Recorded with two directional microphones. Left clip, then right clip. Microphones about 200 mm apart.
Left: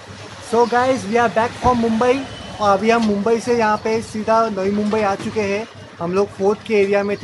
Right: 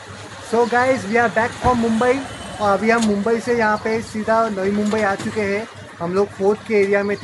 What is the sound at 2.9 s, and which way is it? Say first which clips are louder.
Speech: left 1 dB; 15° left (ahead or behind).